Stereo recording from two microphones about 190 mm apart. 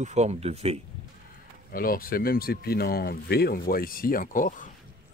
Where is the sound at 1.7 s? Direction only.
50° left (ahead or behind).